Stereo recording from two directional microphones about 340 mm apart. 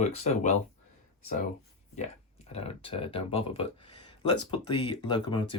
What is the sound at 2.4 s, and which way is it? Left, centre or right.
Speech, centre.